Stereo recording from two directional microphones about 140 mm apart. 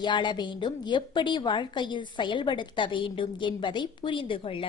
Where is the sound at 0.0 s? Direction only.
35° left (ahead or behind).